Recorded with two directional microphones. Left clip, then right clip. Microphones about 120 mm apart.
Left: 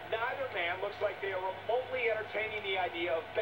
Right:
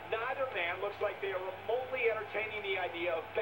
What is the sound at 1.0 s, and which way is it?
Speech, 20° right (ahead or behind).